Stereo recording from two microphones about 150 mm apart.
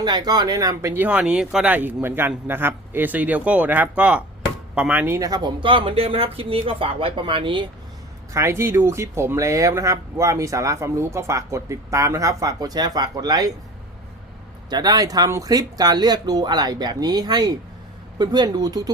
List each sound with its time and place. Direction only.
0.0 s speech: 30° right (ahead or behind)
8.3 s speech: 20° right (ahead or behind)
14.7 s speech: 25° right (ahead or behind)